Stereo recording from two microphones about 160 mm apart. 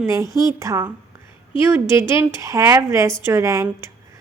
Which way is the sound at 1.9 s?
15° right (ahead or behind).